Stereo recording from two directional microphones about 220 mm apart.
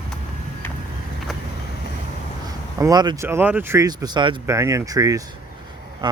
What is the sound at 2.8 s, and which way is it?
Speech, 15° right (ahead or behind).